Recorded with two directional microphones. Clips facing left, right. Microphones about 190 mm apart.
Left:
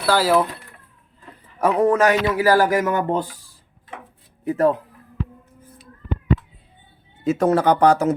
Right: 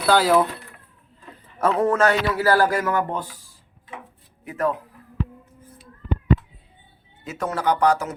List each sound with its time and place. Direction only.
0.0 s speech: 5° left (ahead or behind)
1.6 s a man's voice: 15° left (ahead or behind)
4.4 s speech: 30° left (ahead or behind)
7.3 s speech: 25° left (ahead or behind)